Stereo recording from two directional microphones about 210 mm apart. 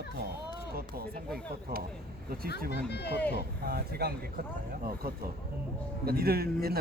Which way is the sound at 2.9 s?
50° left (ahead or behind).